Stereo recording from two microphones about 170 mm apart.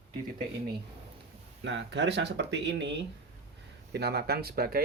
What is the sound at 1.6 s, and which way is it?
Speech, 90° right.